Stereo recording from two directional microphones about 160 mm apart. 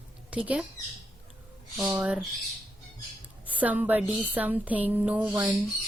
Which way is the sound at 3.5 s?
10° right (ahead or behind).